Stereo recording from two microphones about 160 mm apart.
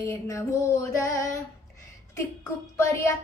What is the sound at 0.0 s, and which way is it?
Female singing, 15° left (ahead or behind).